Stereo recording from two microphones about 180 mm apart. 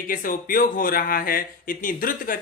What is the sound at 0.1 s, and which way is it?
Speech, 50° left (ahead or behind).